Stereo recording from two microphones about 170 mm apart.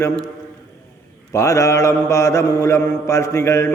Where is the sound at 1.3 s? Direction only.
20° left (ahead or behind).